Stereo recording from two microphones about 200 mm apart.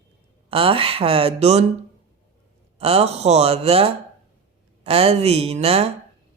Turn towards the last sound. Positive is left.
turn(degrees=-30)  # may be behind; listen again after turning